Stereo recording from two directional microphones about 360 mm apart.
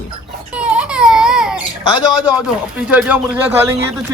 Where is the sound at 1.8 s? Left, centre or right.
Centre.